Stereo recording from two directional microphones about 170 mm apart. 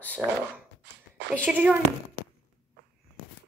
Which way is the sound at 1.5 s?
5° right (ahead or behind).